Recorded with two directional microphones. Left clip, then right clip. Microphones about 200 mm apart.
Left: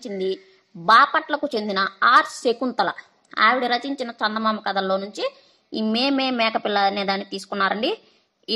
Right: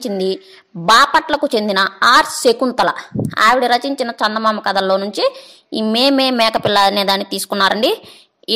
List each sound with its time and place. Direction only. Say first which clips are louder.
0.0 s a woman's voice: right 7 dB; 40° right (ahead or behind)